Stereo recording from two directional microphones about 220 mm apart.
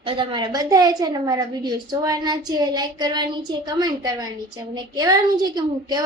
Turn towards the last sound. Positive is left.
turn(degrees=-20)  # may be behind; listen again after turning